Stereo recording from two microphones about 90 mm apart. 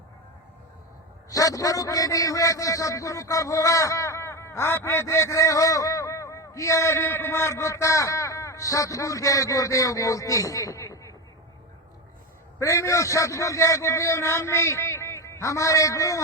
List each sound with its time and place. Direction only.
1.3 s a man's voice: 40° left (ahead or behind)
12.5 s a man's voice: 35° left (ahead or behind)